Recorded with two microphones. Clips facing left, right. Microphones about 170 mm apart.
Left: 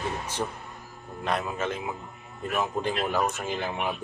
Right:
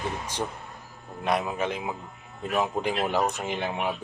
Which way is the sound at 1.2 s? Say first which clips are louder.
Right 2 dB; 15° right (ahead or behind).